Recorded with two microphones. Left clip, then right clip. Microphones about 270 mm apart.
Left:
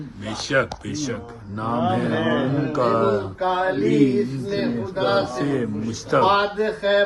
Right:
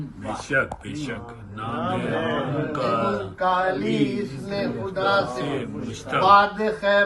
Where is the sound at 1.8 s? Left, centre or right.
Left.